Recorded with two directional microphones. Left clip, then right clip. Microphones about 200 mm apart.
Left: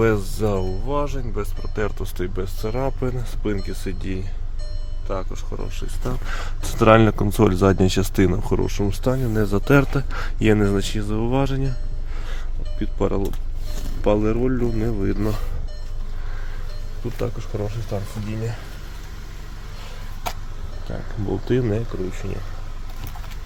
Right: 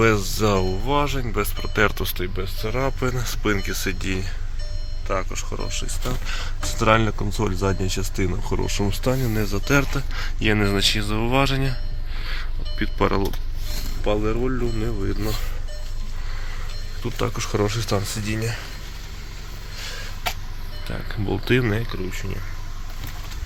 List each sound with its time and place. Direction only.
0.0 s speech: 15° left (ahead or behind)
2.1 s speech: 25° left (ahead or behind)
6.2 s speech: 40° left (ahead or behind)
8.8 s speech: 15° left (ahead or behind)
9.1 s speech: centre (ahead or behind)
9.4 s speech: 35° left (ahead or behind); by 11.7 s 20° left (ahead or behind)
12.8 s speech: 10° left (ahead or behind)
14.0 s speech: 40° left (ahead or behind)
17.0 s speech: centre (ahead or behind)
17.5 s speech: 20° right (ahead or behind)
18.3 s speech: 15° left (ahead or behind)
20.9 s speech: 30° right (ahead or behind)
22.1 s speech: centre (ahead or behind)